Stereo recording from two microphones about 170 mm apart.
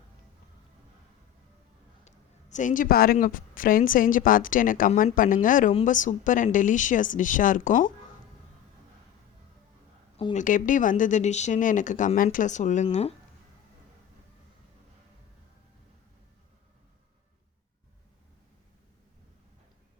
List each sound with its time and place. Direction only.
2.0 s a woman's voice: 45° left (ahead or behind)
10.3 s speech: 50° left (ahead or behind)